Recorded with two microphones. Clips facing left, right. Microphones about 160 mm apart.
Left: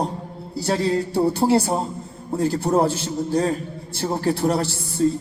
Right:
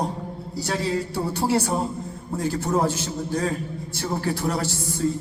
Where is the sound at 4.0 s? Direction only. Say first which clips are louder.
Left 5 dB; 35° left (ahead or behind).